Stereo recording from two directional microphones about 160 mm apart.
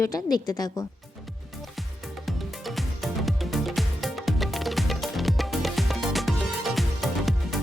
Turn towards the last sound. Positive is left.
turn(degrees=0)  # may be behind; listen again after turning